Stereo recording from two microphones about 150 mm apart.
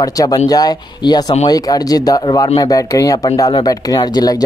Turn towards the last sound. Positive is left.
turn(degrees=25)  # may be behind; listen again after turning